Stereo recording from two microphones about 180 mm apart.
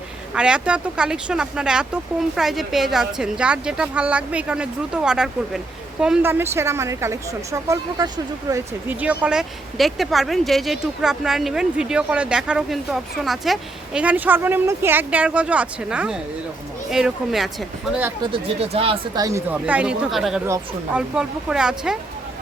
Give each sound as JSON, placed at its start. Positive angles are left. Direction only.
{"t": 0.3, "sound": "speech", "side_deg": -5}
{"t": 18.2, "sound": "speech", "side_deg": -30}
{"t": 19.2, "sound": "speech", "side_deg": -15}